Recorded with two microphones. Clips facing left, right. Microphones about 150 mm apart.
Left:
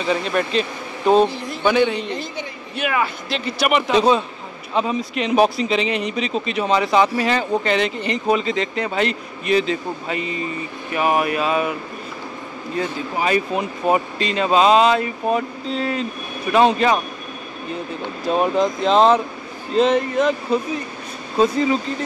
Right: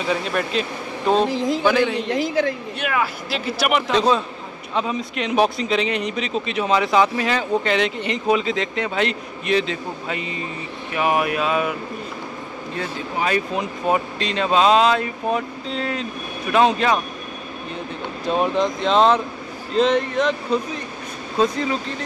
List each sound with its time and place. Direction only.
0.0 s speech: centre (ahead or behind)
1.3 s a woman's voice: 90° right
1.6 s speech: centre (ahead or behind)
2.0 s a woman's voice: 90° right
2.8 s speech: centre (ahead or behind)
12.7 s speech: 5° left (ahead or behind)
18.2 s speech: centre (ahead or behind)